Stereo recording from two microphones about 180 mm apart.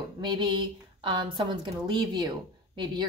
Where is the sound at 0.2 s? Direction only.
25° right (ahead or behind).